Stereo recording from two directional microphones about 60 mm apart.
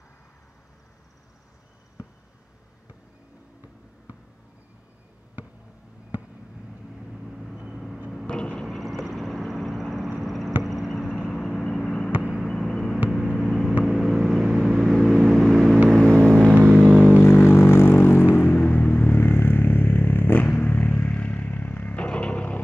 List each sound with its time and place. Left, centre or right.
7.1 s vehicle: centre
8.3 s a sound: centre
8.6 s vehicle: centre
10.2 s a sound: centre
11.2 s vehicle: centre
12.1 s vehicle: right
12.4 s a sound: centre
13.4 s vehicle: centre
16.5 s vehicle: right
17.1 s vehicle: left